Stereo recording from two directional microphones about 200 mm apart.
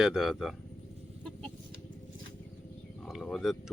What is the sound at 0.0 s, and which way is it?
Speech, centre (ahead or behind).